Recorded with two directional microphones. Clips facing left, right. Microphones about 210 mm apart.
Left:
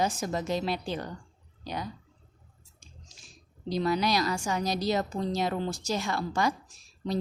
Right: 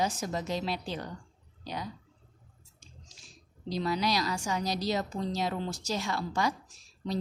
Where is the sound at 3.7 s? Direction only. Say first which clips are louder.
Left 3 dB; 55° left (ahead or behind).